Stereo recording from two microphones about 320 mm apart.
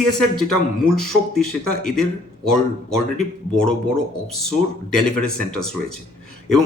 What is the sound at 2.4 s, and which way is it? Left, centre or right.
Speech, centre.